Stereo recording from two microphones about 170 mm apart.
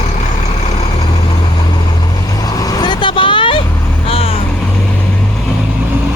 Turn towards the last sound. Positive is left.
turn(degrees=35)  # may be behind; listen again after turning